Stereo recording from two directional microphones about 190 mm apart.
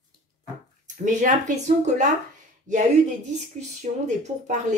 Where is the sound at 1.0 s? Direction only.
40° right (ahead or behind).